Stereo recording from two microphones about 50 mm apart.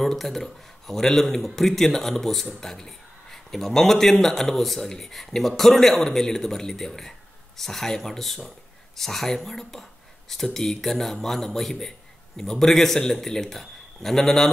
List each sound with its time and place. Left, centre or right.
0.0 s a man's voice: centre